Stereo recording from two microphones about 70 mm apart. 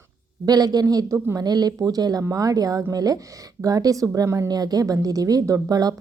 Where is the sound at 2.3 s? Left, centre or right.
Right.